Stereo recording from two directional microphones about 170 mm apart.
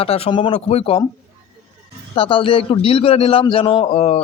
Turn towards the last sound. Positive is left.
turn(degrees=35)  # may be behind; listen again after turning